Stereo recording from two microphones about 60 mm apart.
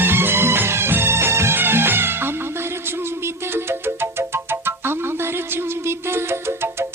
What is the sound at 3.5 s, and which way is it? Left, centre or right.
Music, right.